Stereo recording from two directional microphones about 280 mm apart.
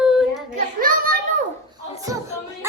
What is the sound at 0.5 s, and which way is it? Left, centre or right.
Speech, right.